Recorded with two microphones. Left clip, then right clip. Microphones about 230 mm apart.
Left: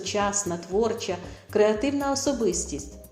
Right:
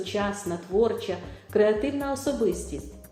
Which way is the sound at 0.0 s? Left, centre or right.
Left.